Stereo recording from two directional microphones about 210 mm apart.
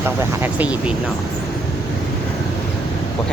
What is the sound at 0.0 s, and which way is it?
Speech, 10° right (ahead or behind).